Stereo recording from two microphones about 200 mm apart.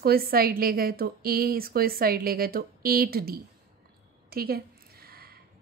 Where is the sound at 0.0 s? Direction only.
50° right (ahead or behind).